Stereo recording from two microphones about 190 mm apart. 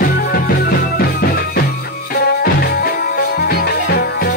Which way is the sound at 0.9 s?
55° left (ahead or behind).